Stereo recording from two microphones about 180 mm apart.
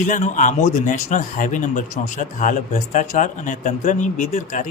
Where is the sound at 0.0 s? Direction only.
45° left (ahead or behind).